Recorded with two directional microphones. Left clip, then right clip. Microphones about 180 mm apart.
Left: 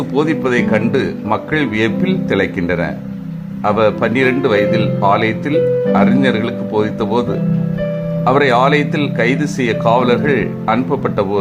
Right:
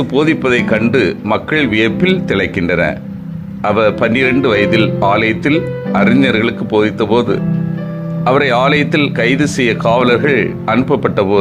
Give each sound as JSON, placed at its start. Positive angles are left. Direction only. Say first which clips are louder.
{"t": 0.1, "sound": "speech", "louder": "right 2 dB", "side_deg": -15}